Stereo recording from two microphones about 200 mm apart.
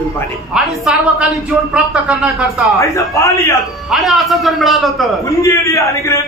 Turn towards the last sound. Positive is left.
turn(degrees=15)  # may be behind; listen again after turning